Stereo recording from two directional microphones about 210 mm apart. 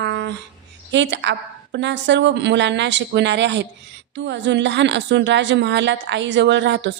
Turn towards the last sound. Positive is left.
turn(degrees=-55)  # may be behind; listen again after turning